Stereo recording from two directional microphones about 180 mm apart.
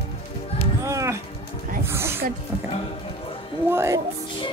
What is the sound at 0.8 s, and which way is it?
Speech, 15° right (ahead or behind).